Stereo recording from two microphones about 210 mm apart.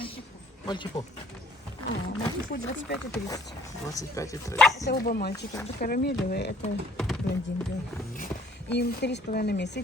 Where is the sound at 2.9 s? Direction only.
50° left (ahead or behind).